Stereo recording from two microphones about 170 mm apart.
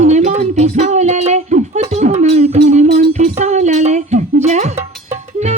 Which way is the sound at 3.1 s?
40° right (ahead or behind).